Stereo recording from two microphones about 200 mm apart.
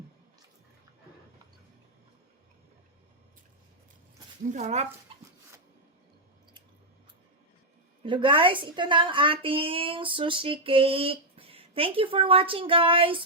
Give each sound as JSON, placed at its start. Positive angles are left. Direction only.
{"t": 4.4, "sound": "speech", "side_deg": -35}
{"t": 8.0, "sound": "a woman's voice", "side_deg": -25}